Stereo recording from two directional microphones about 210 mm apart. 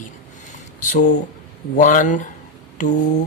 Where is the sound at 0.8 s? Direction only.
40° left (ahead or behind).